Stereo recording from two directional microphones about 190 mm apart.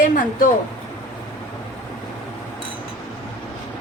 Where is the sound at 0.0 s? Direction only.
45° left (ahead or behind).